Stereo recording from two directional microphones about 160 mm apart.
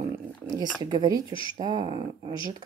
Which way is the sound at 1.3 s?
30° left (ahead or behind).